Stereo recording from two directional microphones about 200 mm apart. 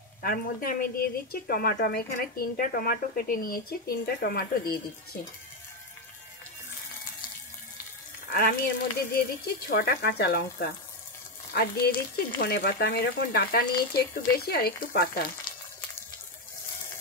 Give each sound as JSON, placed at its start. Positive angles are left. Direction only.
{"t": 0.2, "sound": "a woman's voice", "side_deg": 45}
{"t": 8.3, "sound": "a woman's voice", "side_deg": 45}